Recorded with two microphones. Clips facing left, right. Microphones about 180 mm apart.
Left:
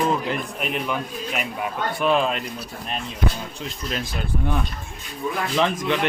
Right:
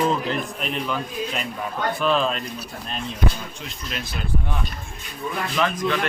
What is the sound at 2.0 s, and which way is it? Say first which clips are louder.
Speech: left 2 dB; 15° left (ahead or behind).